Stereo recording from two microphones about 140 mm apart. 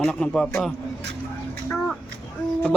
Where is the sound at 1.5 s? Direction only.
5° left (ahead or behind).